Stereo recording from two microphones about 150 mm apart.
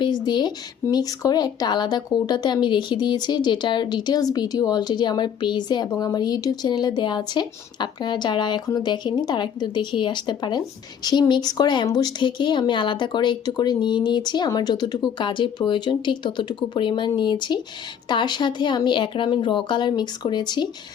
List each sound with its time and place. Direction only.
0.0 s speech: 30° left (ahead or behind)